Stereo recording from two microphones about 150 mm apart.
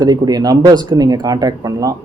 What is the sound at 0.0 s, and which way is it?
Speech, 25° right (ahead or behind).